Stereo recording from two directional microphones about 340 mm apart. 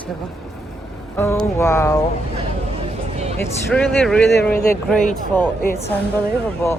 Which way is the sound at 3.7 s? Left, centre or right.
Centre.